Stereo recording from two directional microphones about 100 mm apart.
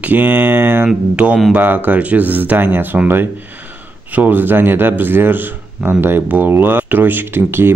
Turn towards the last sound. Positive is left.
turn(degrees=-20)  # may be behind; listen again after turning